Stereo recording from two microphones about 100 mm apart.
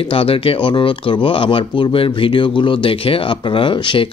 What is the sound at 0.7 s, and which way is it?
A man's voice, 50° left (ahead or behind).